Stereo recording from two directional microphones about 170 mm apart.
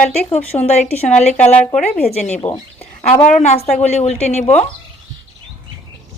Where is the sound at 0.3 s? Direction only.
40° left (ahead or behind).